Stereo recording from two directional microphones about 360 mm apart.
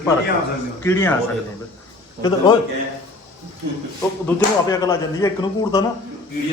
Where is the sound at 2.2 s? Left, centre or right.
Centre.